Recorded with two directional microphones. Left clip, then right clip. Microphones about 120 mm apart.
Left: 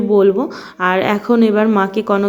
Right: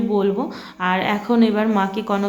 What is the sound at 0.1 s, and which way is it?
Speech, 35° left (ahead or behind).